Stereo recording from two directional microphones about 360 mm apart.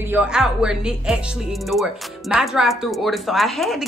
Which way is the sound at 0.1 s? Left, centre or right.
Centre.